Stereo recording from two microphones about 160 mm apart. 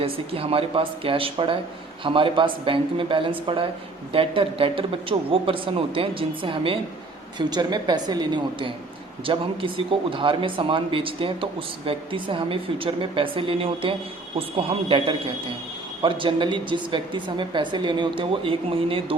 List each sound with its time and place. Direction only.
0.0 s a woman's voice: 35° right (ahead or behind)